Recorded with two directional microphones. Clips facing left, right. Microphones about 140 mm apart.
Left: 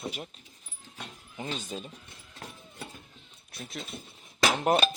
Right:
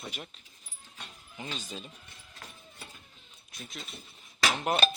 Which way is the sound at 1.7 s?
40° left (ahead or behind).